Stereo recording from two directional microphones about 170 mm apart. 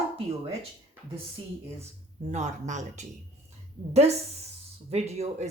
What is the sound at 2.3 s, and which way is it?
Speech, 45° right (ahead or behind).